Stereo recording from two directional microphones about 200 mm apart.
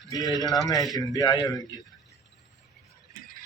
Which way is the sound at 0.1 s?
20° left (ahead or behind).